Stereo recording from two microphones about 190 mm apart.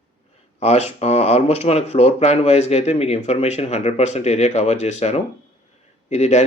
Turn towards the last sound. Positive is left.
turn(degrees=35)  # may be behind; listen again after turning